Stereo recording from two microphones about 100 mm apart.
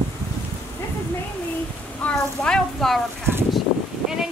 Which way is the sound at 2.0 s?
10° left (ahead or behind).